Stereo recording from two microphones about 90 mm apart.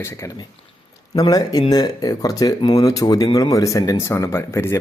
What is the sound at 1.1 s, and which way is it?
Speech, 45° left (ahead or behind).